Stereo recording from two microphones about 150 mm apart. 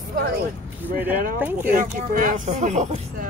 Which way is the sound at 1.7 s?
60° right (ahead or behind).